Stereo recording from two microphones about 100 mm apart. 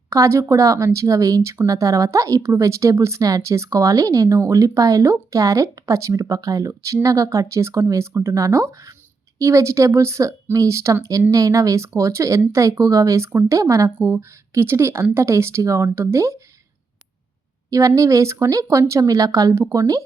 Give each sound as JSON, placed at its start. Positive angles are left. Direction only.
{"t": 0.1, "sound": "speech", "side_deg": -30}
{"t": 17.7, "sound": "speech", "side_deg": -30}